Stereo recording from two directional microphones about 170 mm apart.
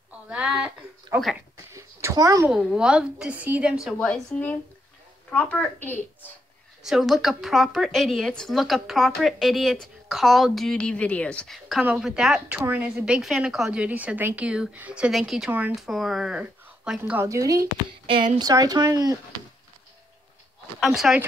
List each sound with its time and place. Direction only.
0.3 s speech: 5° right (ahead or behind)
1.7 s a sound: 15° right (ahead or behind)
2.5 s a woman's voice: 5° right (ahead or behind)
3.8 s a woman's voice: 5° left (ahead or behind)
6.8 s a woman's voice: centre (ahead or behind); by 17.6 s 20° right (ahead or behind)
18.0 s speech: 30° right (ahead or behind)
20.8 s a woman's voice: centre (ahead or behind)